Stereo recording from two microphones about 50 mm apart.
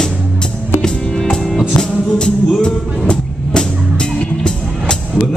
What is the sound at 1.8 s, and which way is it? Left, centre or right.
Music, centre.